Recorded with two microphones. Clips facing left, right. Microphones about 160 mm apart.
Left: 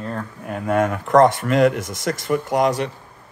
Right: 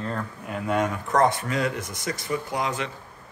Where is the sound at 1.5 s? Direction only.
90° left.